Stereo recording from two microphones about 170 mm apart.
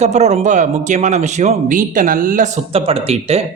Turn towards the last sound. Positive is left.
turn(degrees=-35)  # may be behind; listen again after turning